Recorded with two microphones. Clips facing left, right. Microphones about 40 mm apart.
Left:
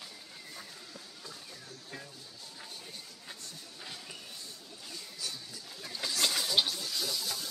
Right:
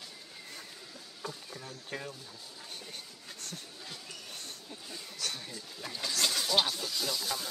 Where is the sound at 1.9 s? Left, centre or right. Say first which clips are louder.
Right 7 dB; right.